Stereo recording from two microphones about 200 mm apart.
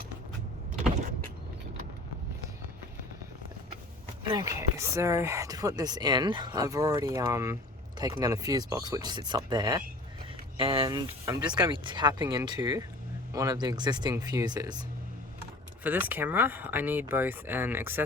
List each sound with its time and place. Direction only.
4.3 s speech: 15° right (ahead or behind)
15.8 s speech: 10° right (ahead or behind)